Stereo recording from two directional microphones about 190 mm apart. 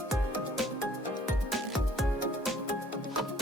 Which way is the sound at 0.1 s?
Centre (ahead or behind).